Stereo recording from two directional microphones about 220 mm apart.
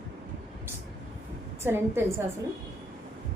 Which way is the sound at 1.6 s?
10° right (ahead or behind).